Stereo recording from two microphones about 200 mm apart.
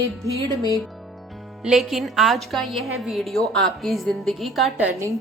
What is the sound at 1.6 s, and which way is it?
A woman's voice, centre (ahead or behind).